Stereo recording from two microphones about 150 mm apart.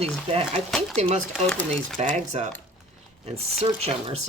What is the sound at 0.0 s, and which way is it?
Speech, 45° right (ahead or behind).